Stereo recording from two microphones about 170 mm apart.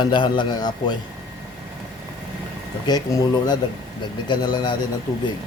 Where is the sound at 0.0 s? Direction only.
25° left (ahead or behind).